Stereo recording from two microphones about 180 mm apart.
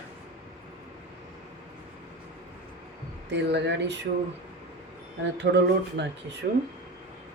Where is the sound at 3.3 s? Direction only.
75° right (ahead or behind).